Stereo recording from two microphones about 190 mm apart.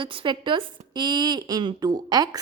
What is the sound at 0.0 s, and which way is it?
A woman's voice, 25° right (ahead or behind).